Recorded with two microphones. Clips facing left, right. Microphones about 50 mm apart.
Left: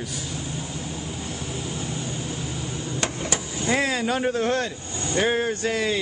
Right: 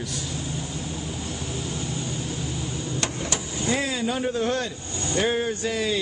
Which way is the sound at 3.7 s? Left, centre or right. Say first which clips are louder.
Left 3 dB; left.